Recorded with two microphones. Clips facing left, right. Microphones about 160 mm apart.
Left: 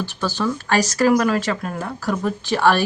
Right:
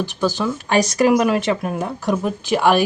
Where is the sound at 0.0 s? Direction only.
15° right (ahead or behind).